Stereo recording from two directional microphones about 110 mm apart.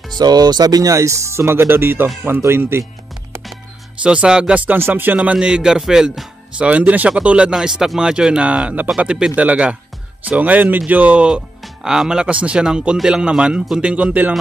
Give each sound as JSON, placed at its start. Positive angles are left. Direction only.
{"t": 0.2, "sound": "speech", "side_deg": -40}
{"t": 4.0, "sound": "speech", "side_deg": -10}